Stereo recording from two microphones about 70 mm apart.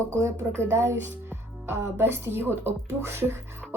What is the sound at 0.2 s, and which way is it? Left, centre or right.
Speech, right.